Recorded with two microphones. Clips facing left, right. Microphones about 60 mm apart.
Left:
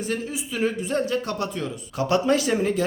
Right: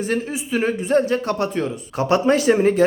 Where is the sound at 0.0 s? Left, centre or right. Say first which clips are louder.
Right 5 dB; right.